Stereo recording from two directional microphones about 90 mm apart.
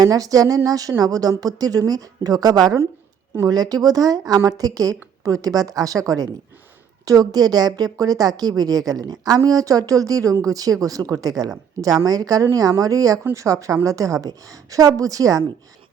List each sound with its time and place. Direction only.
0.0 s a woman's voice: 40° right (ahead or behind)